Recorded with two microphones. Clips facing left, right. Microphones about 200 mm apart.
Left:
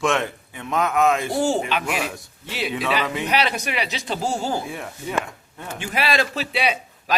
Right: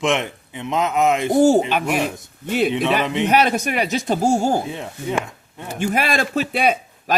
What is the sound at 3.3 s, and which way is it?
A man's voice, 50° right (ahead or behind).